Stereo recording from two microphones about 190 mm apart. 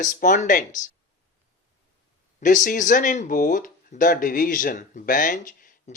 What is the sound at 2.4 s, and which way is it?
Speech, 40° left (ahead or behind).